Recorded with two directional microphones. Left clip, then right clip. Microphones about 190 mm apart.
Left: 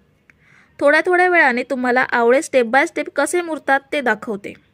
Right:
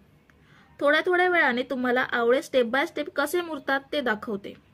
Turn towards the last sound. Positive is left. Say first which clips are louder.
# left 8 dB
turn(degrees=40)  # may be behind; listen again after turning